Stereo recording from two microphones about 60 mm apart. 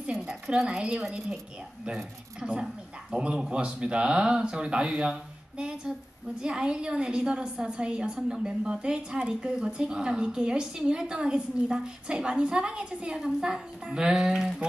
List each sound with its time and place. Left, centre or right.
0.3 s a woman's voice: centre
2.6 s a woman's voice: centre